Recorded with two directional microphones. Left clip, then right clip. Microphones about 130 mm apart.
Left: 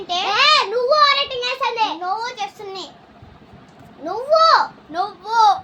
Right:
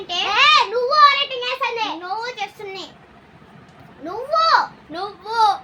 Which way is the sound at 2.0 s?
40° left (ahead or behind).